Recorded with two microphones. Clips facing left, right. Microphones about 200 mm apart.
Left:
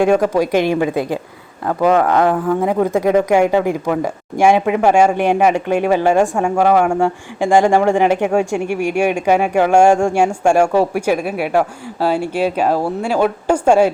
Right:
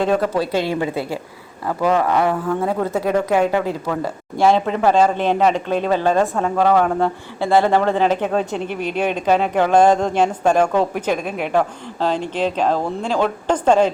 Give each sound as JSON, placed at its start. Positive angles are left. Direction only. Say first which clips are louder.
{"t": 0.0, "sound": "speech", "louder": "left 5 dB", "side_deg": 10}
{"t": 2.6, "sound": "speech", "louder": "left 4 dB", "side_deg": 15}